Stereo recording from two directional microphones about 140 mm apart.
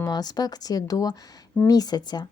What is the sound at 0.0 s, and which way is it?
A woman's voice, 30° left (ahead or behind).